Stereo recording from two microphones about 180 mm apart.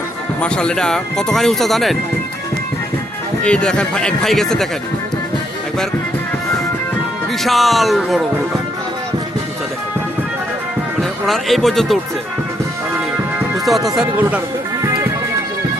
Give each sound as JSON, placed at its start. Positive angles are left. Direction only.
{"t": 0.4, "sound": "speech", "side_deg": 5}
{"t": 3.4, "sound": "speech", "side_deg": 5}
{"t": 7.4, "sound": "speech", "side_deg": 0}
{"t": 11.3, "sound": "speech", "side_deg": 0}
{"t": 13.7, "sound": "speech", "side_deg": 0}
{"t": 14.8, "sound": "music", "side_deg": -20}